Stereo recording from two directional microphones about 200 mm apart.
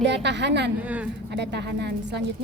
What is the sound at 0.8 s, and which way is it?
Speech, 5° right (ahead or behind).